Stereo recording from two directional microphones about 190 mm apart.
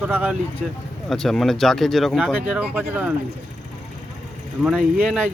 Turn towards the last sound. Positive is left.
turn(degrees=0)  # may be behind; listen again after turning